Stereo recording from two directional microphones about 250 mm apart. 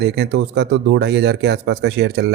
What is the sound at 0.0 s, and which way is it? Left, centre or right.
Speech, right.